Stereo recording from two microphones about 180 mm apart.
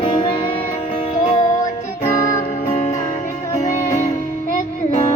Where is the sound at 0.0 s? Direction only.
30° left (ahead or behind).